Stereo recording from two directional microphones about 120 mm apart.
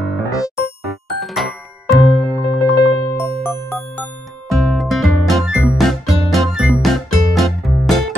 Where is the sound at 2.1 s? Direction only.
20° left (ahead or behind).